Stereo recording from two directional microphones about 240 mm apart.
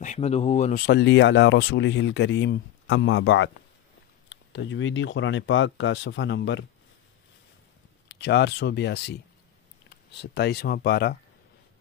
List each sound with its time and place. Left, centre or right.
0.0 s speech: left
0.8 s speech: left
8.1 s speech: left
10.1 s speech: left